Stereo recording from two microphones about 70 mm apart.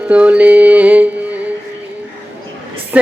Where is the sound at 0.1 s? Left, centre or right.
Centre.